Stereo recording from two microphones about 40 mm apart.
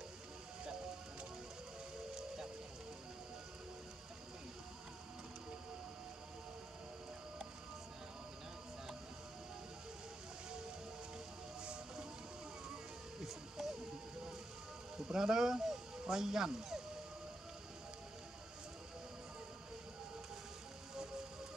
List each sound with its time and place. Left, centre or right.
11.6 s music: right
13.2 s music: centre
15.0 s speech: centre